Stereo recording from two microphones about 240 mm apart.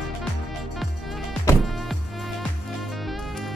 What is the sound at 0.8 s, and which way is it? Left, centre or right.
Music, centre.